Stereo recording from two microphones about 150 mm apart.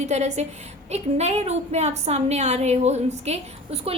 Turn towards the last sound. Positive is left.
turn(degrees=-45)  # may be behind; listen again after turning